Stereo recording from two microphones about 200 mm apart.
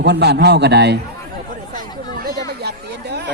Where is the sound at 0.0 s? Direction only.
55° right (ahead or behind).